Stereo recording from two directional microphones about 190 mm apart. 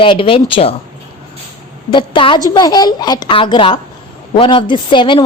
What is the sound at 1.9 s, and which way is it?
A woman's voice, 25° left (ahead or behind).